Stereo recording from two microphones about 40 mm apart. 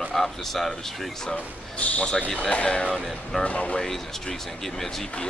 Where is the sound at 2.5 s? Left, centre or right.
Left.